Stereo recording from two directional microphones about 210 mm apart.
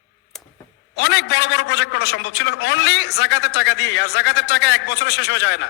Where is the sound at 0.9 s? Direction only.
55° left (ahead or behind).